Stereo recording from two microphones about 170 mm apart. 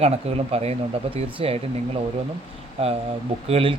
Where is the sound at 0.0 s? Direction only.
35° right (ahead or behind).